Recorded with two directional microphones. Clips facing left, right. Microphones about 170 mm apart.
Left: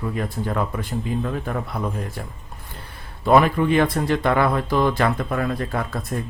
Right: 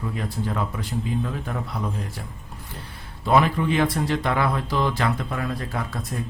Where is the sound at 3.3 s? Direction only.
55° left (ahead or behind).